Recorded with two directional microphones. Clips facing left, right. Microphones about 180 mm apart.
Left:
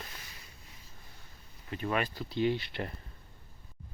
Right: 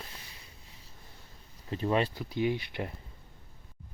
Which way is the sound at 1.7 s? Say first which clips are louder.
Right 4 dB; 30° right (ahead or behind).